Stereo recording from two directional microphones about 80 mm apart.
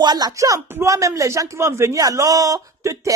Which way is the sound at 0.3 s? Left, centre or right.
Right.